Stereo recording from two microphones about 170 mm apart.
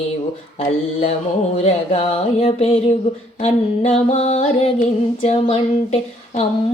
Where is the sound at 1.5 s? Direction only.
40° left (ahead or behind).